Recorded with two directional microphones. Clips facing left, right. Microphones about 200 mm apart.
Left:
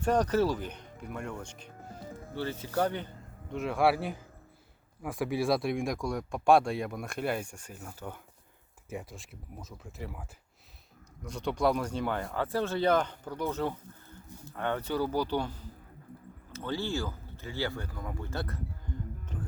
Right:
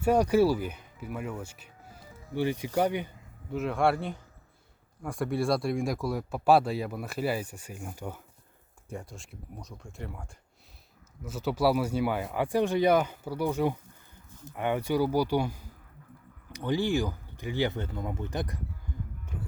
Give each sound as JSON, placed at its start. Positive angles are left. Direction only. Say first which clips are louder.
{"t": 0.0, "sound": "speech", "louder": "right 4 dB", "side_deg": -10}
{"t": 2.0, "sound": "music", "louder": "left 10 dB", "side_deg": 50}
{"t": 2.3, "sound": "speech", "louder": "right 5 dB", "side_deg": -15}
{"t": 3.5, "sound": "speech", "louder": "even", "side_deg": 0}
{"t": 8.9, "sound": "speech", "louder": "even", "side_deg": 0}
{"t": 18.9, "sound": "music", "louder": "left 1 dB", "side_deg": -10}